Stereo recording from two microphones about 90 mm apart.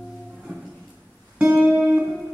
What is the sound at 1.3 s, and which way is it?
Music, 15° right (ahead or behind).